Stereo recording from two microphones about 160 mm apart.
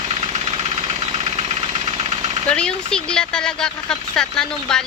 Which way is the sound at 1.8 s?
40° right (ahead or behind).